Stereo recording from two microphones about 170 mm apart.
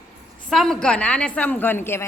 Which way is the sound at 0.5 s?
Centre (ahead or behind).